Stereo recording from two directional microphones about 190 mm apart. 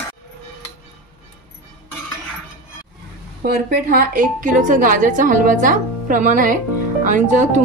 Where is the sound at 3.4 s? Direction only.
50° right (ahead or behind).